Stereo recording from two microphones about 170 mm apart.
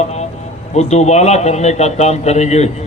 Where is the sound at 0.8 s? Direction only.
40° left (ahead or behind).